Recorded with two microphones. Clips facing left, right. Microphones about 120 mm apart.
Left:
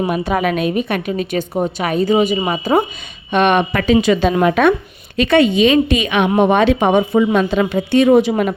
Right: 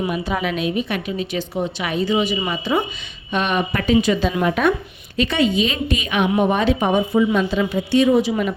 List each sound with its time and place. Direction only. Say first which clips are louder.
0.1 s a woman's voice: left 5 dB; 55° left (ahead or behind)
3.3 s a woman's voice: left 7 dB; 65° left (ahead or behind)
5.1 s a woman's voice: left 6 dB; 65° left (ahead or behind)
7.3 s a woman's voice: left 4 dB; 60° left (ahead or behind)